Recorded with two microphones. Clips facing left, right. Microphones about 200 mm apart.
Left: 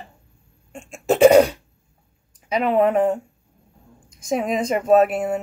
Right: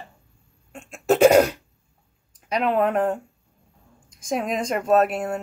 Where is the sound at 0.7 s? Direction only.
Centre (ahead or behind).